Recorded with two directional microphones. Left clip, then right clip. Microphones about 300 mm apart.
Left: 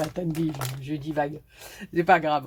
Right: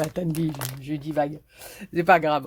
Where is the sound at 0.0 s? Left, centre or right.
Right.